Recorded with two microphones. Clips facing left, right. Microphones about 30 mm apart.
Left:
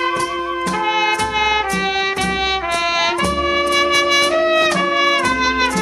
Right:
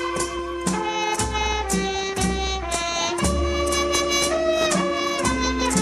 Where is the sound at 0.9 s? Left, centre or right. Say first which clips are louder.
Left 7 dB; left.